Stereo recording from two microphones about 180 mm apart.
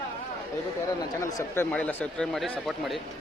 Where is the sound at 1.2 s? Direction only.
20° left (ahead or behind); by 3.0 s centre (ahead or behind).